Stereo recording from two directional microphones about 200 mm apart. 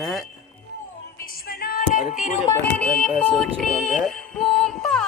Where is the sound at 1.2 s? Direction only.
50° left (ahead or behind).